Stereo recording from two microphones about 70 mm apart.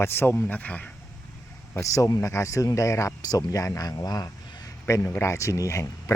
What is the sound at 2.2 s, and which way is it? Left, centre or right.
Speech, left.